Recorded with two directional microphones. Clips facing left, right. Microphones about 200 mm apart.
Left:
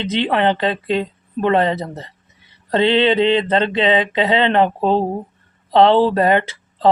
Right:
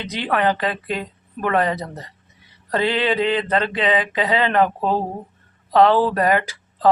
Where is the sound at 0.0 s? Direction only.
25° left (ahead or behind).